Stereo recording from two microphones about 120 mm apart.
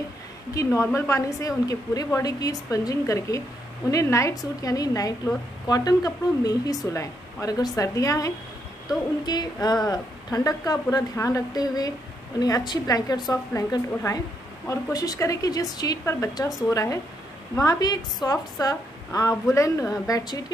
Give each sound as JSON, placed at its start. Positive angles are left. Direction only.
{"t": 0.7, "sound": "a woman's voice", "side_deg": 25}